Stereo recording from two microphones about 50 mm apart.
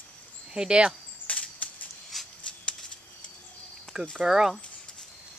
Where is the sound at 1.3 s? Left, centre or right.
Left.